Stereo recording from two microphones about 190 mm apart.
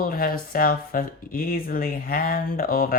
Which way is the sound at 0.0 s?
50° left (ahead or behind).